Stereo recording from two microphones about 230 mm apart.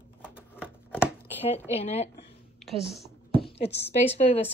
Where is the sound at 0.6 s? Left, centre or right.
Centre.